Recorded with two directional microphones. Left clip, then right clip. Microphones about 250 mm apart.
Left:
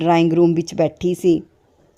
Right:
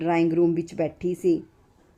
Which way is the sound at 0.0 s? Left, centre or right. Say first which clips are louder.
Left 7 dB; left.